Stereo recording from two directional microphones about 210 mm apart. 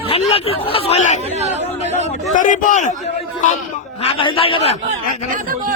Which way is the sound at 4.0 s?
25° left (ahead or behind).